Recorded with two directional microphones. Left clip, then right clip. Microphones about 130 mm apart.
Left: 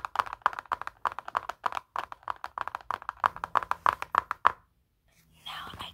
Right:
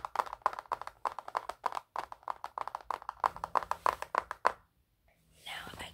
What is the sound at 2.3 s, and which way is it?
Clapping, 5° right (ahead or behind).